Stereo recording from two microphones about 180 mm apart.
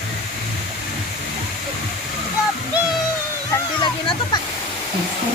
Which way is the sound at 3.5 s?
25° left (ahead or behind).